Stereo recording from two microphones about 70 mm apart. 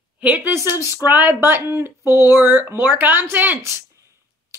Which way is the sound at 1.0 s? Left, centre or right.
Right.